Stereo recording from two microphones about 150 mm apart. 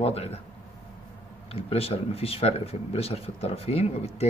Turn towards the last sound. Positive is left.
turn(degrees=45)  # may be behind; listen again after turning